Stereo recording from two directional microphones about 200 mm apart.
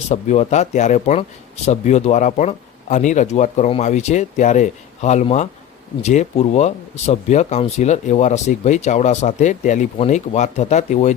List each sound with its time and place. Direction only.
0.1 s speech: 35° left (ahead or behind)